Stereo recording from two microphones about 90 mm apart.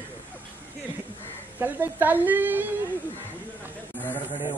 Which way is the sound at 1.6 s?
20° right (ahead or behind).